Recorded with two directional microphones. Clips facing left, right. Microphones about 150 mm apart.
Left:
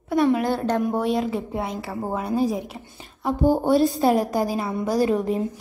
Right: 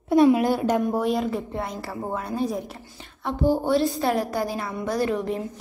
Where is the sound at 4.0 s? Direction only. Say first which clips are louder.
Left 4 dB; 20° left (ahead or behind).